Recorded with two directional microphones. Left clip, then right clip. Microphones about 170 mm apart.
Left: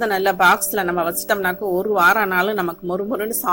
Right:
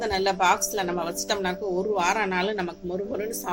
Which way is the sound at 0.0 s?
50° left (ahead or behind).